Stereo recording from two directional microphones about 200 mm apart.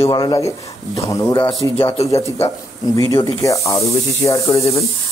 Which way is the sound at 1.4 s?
30° left (ahead or behind).